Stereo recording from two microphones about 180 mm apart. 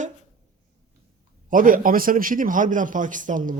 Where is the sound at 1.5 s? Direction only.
50° right (ahead or behind).